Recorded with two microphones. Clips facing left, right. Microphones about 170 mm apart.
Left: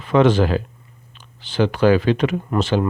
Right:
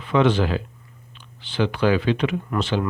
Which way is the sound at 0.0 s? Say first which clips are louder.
Left 4 dB; 45° left (ahead or behind).